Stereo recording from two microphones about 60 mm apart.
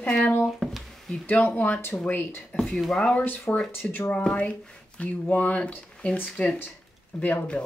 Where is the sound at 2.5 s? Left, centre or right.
Centre.